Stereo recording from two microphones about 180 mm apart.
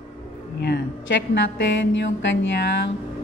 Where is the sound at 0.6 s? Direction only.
75° left (ahead or behind); by 2.3 s 90° left.